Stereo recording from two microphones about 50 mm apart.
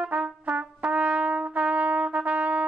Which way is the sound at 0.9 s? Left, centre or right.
Right.